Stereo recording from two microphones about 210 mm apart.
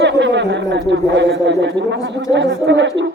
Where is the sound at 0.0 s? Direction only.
55° right (ahead or behind).